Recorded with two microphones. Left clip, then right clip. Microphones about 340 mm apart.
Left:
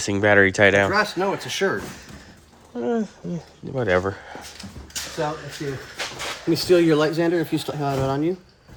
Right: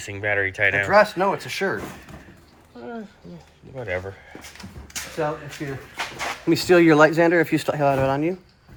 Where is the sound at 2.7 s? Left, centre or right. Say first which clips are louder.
Left 11 dB; left.